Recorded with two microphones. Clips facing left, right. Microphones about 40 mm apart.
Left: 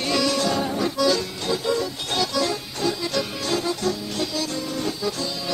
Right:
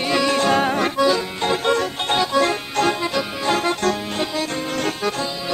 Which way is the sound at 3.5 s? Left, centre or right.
Right.